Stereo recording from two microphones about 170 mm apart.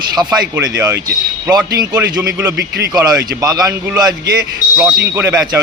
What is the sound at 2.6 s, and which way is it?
Speech, 75° right (ahead or behind).